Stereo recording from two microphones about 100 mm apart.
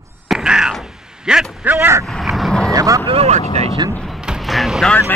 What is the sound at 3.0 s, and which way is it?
Speech, 80° right.